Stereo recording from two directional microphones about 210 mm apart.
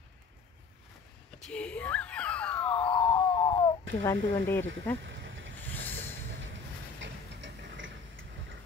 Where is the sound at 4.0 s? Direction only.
15° left (ahead or behind).